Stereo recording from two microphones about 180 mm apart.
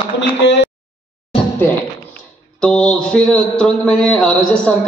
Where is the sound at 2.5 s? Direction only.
5° left (ahead or behind).